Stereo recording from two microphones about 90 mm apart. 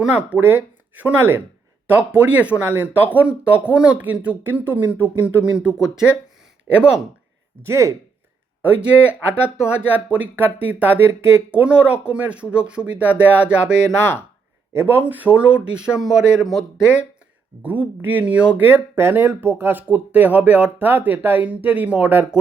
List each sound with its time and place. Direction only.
0.0 s speech: 15° right (ahead or behind)
7.6 s speech: 30° right (ahead or behind)
8.6 s speech: 15° right (ahead or behind)
9.0 s speech: 25° left (ahead or behind)
9.6 s speech: 10° right (ahead or behind)
11.5 s speech: 15° right (ahead or behind)
14.0 s speech: 25° left (ahead or behind)
14.7 s speech: 25° right (ahead or behind)